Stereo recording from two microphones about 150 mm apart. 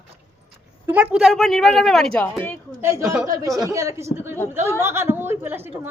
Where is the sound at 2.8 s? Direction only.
20° right (ahead or behind).